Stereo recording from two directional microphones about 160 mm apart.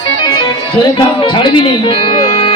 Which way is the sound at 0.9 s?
30° left (ahead or behind).